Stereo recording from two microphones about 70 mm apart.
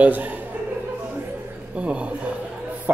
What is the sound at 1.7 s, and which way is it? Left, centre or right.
Speech, centre.